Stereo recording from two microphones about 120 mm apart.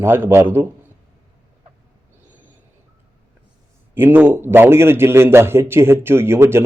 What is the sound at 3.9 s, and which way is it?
A man's voice, 15° right (ahead or behind).